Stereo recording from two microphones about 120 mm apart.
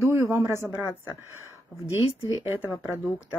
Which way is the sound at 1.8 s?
50° left (ahead or behind).